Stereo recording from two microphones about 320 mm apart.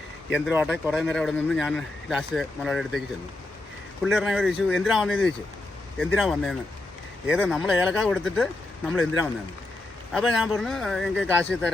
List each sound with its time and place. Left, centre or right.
0.3 s speech: centre
4.0 s speech: centre